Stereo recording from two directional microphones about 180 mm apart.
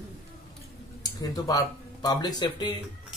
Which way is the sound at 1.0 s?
20° left (ahead or behind).